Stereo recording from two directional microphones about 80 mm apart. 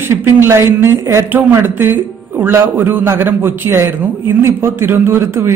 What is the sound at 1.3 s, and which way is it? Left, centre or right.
A man's voice, right.